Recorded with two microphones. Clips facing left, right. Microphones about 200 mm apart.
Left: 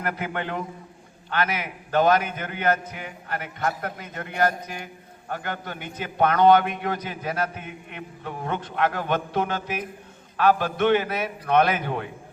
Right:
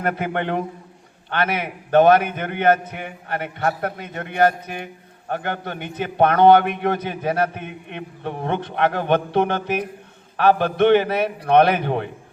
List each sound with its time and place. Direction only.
0.0 s a man's voice: 55° right (ahead or behind)